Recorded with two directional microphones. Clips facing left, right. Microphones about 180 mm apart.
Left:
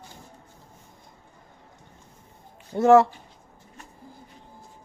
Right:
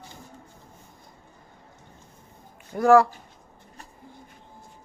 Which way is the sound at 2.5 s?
25° left (ahead or behind).